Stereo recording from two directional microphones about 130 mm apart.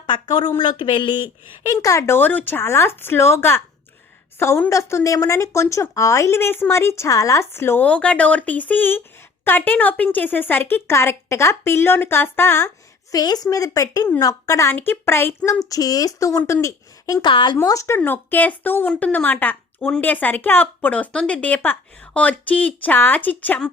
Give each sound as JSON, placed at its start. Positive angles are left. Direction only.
{"t": 0.1, "sound": "speech", "side_deg": 35}
{"t": 15.7, "sound": "speech", "side_deg": 30}
{"t": 17.2, "sound": "speech", "side_deg": 40}
{"t": 17.6, "sound": "speech", "side_deg": 25}